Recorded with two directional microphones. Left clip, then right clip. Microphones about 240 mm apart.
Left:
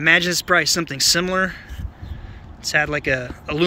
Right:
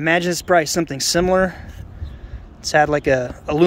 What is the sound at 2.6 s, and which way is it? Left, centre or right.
Speech, right.